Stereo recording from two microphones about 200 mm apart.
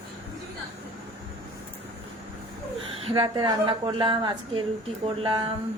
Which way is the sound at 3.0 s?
25° right (ahead or behind).